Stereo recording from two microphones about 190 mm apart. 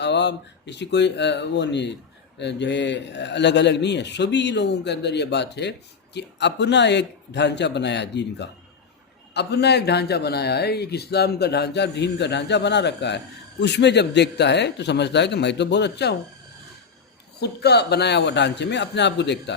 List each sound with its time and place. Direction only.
0.0 s a man's voice: 65° left (ahead or behind)
17.4 s a man's voice: 60° left (ahead or behind)